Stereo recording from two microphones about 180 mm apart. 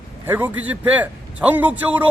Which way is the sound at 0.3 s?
10° right (ahead or behind).